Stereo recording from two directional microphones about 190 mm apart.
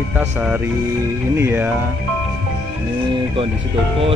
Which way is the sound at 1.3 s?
10° right (ahead or behind).